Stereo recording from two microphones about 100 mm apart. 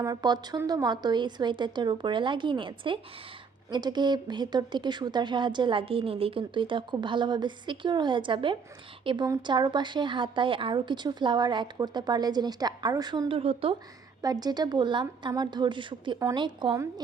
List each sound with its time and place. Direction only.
0.0 s speech: 40° right (ahead or behind); by 3.0 s 55° right (ahead or behind)
3.7 s speech: 45° right (ahead or behind)
13.2 s speech: 70° right (ahead or behind)
14.2 s speech: 40° right (ahead or behind)